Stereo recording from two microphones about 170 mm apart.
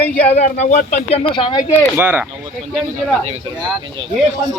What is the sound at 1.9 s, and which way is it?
Speech, 10° right (ahead or behind).